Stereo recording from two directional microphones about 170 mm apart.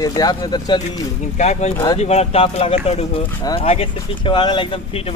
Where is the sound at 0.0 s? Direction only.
25° left (ahead or behind).